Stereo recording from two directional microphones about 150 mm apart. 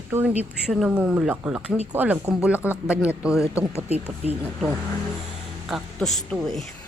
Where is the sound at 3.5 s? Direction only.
20° left (ahead or behind).